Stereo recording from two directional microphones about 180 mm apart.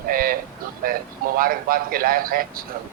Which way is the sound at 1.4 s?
55° right (ahead or behind).